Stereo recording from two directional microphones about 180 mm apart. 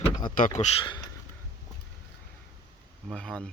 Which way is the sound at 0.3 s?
45° left (ahead or behind).